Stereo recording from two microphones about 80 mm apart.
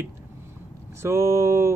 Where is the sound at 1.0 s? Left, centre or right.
Right.